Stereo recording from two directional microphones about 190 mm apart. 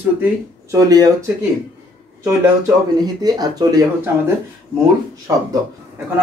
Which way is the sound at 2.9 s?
20° right (ahead or behind).